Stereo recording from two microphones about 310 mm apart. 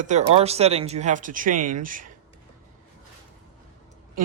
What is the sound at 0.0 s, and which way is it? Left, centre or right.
Speech, right.